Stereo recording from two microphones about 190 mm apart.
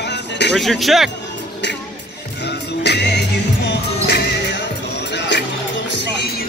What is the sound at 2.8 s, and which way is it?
Music, 65° left (ahead or behind).